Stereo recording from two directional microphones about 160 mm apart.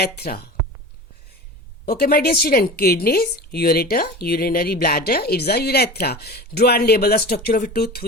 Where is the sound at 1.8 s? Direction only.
70° left (ahead or behind).